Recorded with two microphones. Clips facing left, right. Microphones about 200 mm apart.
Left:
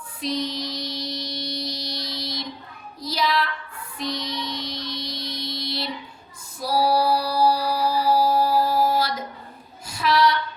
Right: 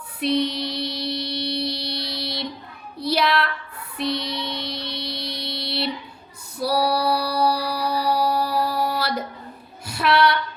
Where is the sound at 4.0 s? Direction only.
65° right (ahead or behind).